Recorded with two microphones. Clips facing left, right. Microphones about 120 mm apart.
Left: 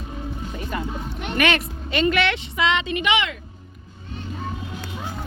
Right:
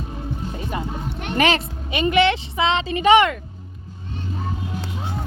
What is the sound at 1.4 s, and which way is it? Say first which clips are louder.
A woman's voice: right 2 dB; 30° right (ahead or behind).